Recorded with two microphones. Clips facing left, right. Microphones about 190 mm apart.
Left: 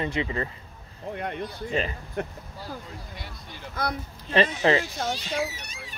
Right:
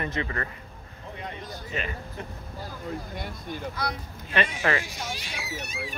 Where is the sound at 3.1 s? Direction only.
50° right (ahead or behind).